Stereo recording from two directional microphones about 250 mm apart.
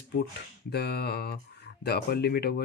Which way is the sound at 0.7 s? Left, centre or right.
Left.